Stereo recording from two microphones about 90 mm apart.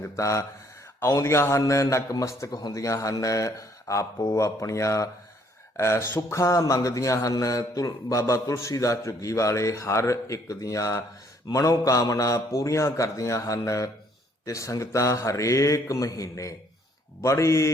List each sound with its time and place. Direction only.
0.0 s speech: 35° left (ahead or behind)
2.5 s speech: 45° left (ahead or behind)